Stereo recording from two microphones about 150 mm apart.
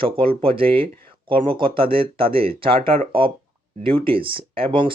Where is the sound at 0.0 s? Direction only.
35° right (ahead or behind).